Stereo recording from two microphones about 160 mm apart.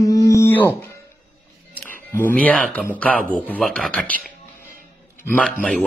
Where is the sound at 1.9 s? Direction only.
10° left (ahead or behind).